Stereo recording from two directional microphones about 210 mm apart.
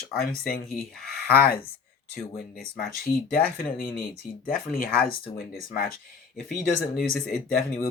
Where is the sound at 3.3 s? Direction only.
45° left (ahead or behind).